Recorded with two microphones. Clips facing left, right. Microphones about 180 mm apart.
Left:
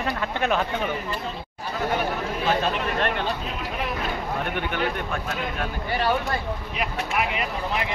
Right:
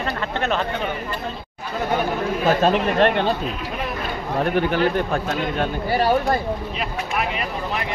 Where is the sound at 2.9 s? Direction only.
30° right (ahead or behind).